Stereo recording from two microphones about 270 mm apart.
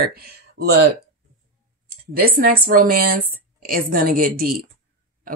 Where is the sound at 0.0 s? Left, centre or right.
Right.